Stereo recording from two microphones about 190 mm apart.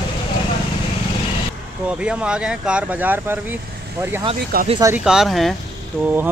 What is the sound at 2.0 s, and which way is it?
Speech, 5° right (ahead or behind).